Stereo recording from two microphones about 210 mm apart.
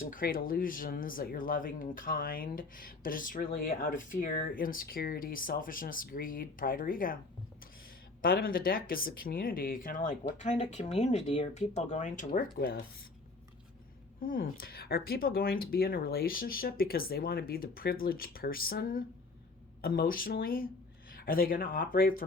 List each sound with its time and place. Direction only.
0.1 s speech: 40° left (ahead or behind)
8.2 s speech: 45° left (ahead or behind)
14.2 s speech: 40° left (ahead or behind)